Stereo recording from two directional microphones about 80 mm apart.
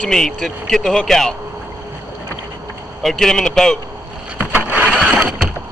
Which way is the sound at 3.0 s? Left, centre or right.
Centre.